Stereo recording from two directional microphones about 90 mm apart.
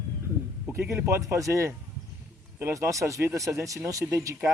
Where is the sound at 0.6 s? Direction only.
30° right (ahead or behind).